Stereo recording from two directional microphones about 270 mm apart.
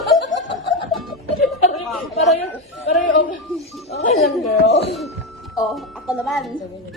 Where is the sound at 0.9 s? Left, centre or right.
Centre.